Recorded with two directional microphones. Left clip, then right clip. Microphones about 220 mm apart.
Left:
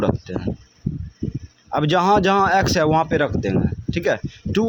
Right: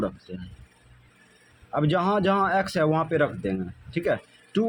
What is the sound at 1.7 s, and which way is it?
Speech, 25° left (ahead or behind).